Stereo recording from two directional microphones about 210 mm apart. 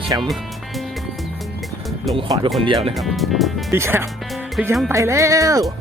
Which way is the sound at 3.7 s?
10° right (ahead or behind).